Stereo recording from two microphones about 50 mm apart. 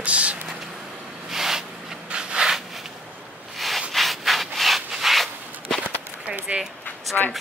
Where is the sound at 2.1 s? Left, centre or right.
Centre.